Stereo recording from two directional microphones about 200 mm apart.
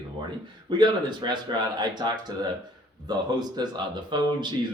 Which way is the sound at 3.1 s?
20° right (ahead or behind).